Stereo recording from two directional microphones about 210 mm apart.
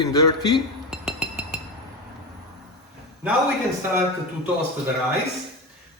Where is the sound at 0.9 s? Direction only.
5° right (ahead or behind).